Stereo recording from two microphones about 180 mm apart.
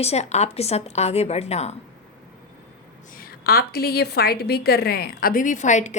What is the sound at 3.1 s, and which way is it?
A woman's voice, 55° left (ahead or behind).